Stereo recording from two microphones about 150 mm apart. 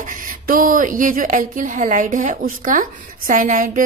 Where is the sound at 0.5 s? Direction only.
65° right (ahead or behind).